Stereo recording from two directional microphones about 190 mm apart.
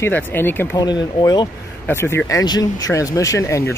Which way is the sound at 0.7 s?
20° left (ahead or behind).